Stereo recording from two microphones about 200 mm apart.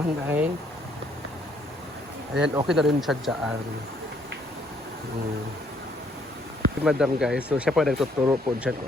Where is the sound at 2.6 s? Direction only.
Centre (ahead or behind).